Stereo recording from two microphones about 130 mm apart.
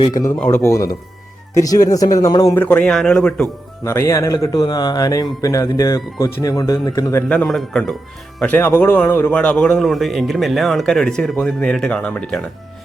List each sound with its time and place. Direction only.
0.1 s a man's voice: 25° left (ahead or behind)
2.6 s speech: 10° left (ahead or behind)
3.8 s a man's voice: 20° left (ahead or behind)
7.3 s a man's voice: 5° left (ahead or behind)